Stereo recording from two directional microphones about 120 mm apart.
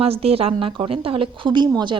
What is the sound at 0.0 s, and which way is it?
A woman's voice, 55° right (ahead or behind).